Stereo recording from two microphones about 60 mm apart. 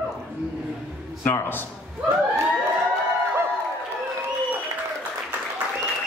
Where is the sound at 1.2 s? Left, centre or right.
Left.